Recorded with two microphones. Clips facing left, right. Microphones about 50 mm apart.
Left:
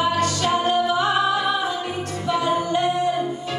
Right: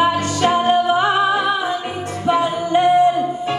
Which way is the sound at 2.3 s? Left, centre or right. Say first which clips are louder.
Right 4 dB; right.